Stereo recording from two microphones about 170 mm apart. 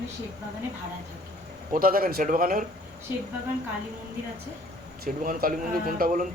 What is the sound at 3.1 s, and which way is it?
Speech, 10° right (ahead or behind).